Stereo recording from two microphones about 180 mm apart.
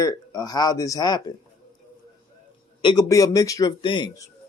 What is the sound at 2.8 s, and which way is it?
Speech, 20° left (ahead or behind).